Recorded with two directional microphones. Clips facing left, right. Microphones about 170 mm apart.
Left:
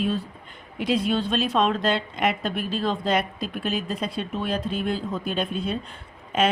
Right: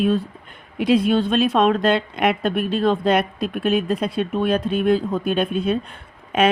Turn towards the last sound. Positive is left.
turn(degrees=-60)  # may be behind; listen again after turning